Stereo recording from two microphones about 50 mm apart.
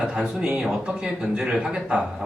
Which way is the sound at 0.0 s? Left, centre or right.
Centre.